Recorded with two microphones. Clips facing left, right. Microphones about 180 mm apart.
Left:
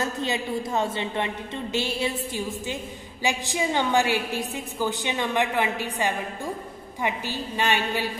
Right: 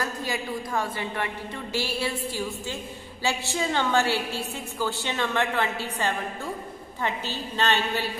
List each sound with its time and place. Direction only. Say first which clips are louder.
0.0 s a woman's voice: left 3 dB; 25° left (ahead or behind)